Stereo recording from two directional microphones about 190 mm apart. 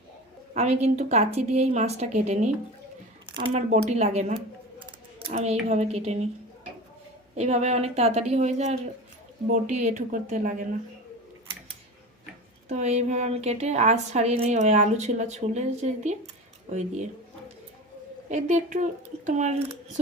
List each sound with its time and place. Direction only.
0.5 s a woman's voice: 35° right (ahead or behind)
3.2 s speech: 25° right (ahead or behind)
3.7 s a woman's voice: 35° right (ahead or behind)
7.3 s a woman's voice: 35° right (ahead or behind)
12.6 s a woman's voice: 35° right (ahead or behind)
18.3 s a woman's voice: 40° right (ahead or behind)